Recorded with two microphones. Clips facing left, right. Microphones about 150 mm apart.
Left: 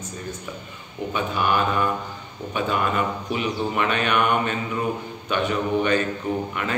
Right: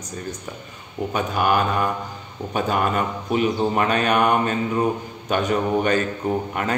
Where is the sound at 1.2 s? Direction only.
45° right (ahead or behind).